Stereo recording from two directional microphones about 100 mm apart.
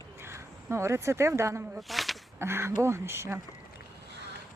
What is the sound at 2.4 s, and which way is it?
Speech, 25° right (ahead or behind).